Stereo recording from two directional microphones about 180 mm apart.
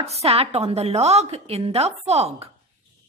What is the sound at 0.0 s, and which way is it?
A woman's voice, 35° right (ahead or behind).